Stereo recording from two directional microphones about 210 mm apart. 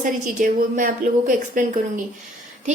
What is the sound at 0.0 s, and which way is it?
Speech, 40° right (ahead or behind).